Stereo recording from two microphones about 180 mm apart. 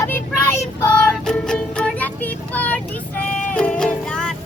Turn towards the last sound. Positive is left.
turn(degrees=5)  # may be behind; listen again after turning